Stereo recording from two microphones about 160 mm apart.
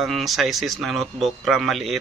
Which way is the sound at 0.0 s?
Centre (ahead or behind).